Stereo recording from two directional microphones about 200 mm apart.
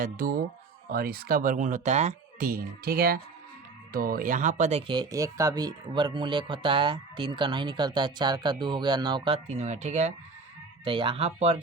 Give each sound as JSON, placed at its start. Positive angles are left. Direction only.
{"t": 0.0, "sound": "speech", "side_deg": -45}